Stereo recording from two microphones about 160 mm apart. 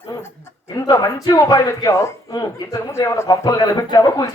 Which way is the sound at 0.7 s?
25° left (ahead or behind).